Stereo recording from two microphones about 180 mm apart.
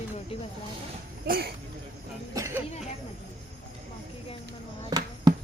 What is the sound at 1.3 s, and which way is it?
Speech, 60° right (ahead or behind).